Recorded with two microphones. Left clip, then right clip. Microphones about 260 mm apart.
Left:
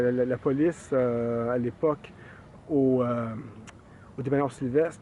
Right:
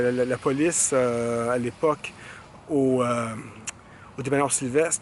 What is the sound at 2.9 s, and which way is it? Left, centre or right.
Speech, centre.